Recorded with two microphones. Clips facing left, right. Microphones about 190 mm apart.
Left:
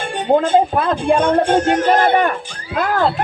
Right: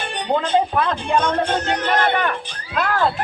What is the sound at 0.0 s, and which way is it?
Speech, 45° left (ahead or behind).